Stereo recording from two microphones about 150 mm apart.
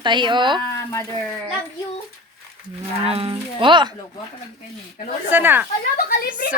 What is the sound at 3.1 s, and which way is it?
Speech, 40° right (ahead or behind).